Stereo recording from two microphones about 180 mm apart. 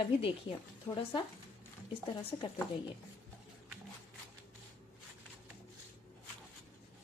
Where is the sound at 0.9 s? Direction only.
15° left (ahead or behind).